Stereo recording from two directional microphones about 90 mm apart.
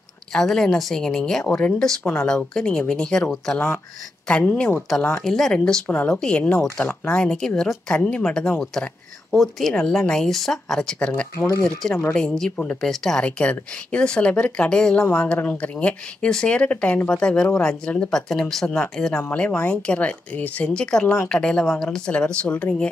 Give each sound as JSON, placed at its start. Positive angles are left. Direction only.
{"t": 0.3, "sound": "speech", "side_deg": 5}
{"t": 3.5, "sound": "a woman's voice", "side_deg": 25}
{"t": 4.7, "sound": "speech", "side_deg": 0}
{"t": 5.9, "sound": "a woman's voice", "side_deg": 20}
{"t": 7.2, "sound": "speech", "side_deg": 5}
{"t": 11.3, "sound": "speech", "side_deg": 35}
{"t": 12.1, "sound": "speech", "side_deg": 5}